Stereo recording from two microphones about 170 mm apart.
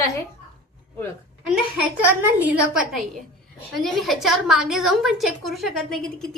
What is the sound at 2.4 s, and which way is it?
A woman's voice, 10° right (ahead or behind).